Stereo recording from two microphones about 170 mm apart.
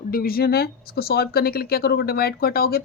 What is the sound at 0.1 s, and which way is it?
Speech, 60° left (ahead or behind).